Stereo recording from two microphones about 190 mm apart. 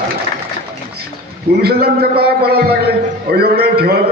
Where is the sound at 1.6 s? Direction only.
55° right (ahead or behind).